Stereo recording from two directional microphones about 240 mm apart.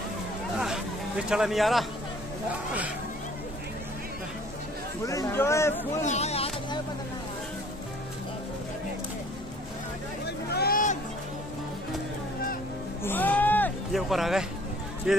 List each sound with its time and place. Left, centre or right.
0.6 s a sound: centre
5.0 s speech: centre
6.0 s music: left
10.2 s vehicle: left
13.0 s music: centre
15.1 s speech: centre